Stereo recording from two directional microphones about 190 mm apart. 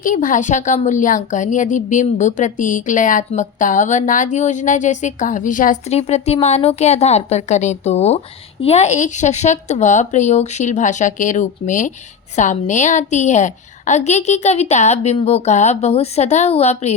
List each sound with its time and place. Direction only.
0.0 s a woman's voice: 45° left (ahead or behind)